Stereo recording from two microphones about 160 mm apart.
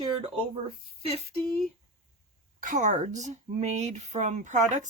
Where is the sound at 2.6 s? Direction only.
55° right (ahead or behind).